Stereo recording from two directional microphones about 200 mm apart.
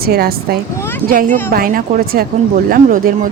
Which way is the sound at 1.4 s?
45° right (ahead or behind).